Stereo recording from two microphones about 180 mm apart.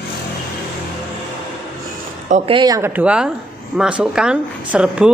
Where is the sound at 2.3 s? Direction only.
40° right (ahead or behind).